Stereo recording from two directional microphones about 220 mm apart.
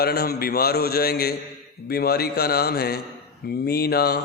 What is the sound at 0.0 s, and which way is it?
A man's voice, 45° left (ahead or behind).